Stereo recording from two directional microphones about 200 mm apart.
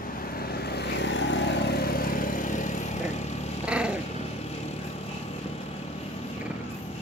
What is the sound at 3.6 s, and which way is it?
Dog, 5° right (ahead or behind).